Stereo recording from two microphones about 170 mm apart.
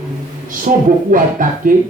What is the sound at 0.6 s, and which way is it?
Speech, 50° right (ahead or behind).